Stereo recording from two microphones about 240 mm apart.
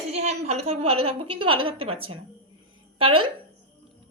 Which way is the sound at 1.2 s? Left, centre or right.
Right.